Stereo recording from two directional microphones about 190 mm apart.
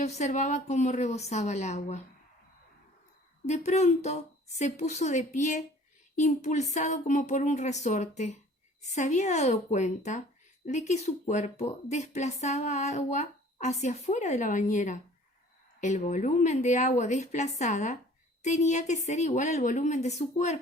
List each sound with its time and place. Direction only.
0.0 s speech: 35° left (ahead or behind)
3.4 s speech: 35° left (ahead or behind)